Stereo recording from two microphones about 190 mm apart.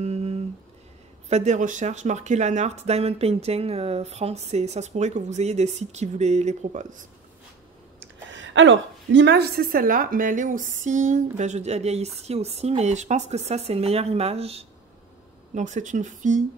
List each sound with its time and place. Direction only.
0.0 s a sound: 35° right (ahead or behind)
1.3 s a woman's voice: 40° right (ahead or behind)
8.0 s a woman's voice: 80° right; by 16.4 s 40° right (ahead or behind)